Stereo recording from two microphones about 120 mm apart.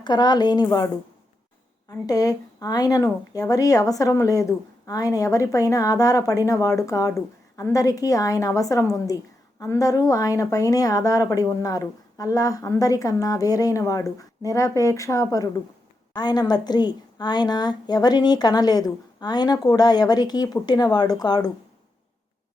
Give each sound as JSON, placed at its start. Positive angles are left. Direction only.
{"t": 0.0, "sound": "a woman's voice", "side_deg": 35}
{"t": 1.9, "sound": "a woman's voice", "side_deg": 30}